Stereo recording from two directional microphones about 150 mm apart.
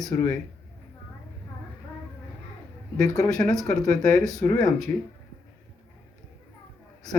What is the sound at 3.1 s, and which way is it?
Speech, 25° left (ahead or behind).